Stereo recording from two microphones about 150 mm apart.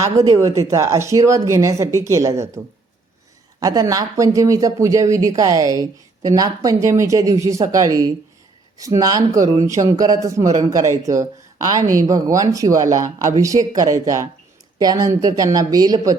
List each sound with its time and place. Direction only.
0.0 s speech: 20° right (ahead or behind)
3.6 s speech: 25° right (ahead or behind)